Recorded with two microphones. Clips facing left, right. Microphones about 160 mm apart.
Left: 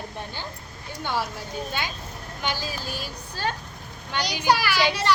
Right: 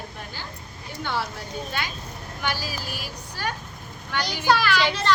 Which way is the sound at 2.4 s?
20° left (ahead or behind).